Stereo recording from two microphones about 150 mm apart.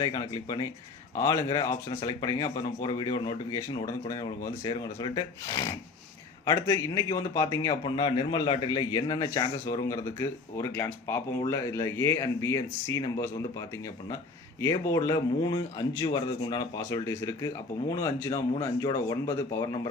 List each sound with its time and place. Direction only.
0.0 s a man's voice: 30° left (ahead or behind)
4.4 s a man's voice: 25° left (ahead or behind)